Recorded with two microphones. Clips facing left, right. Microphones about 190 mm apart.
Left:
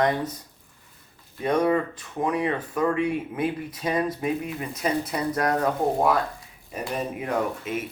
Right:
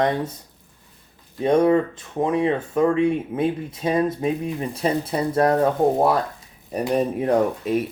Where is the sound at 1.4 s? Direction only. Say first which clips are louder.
Right 5 dB; 25° right (ahead or behind).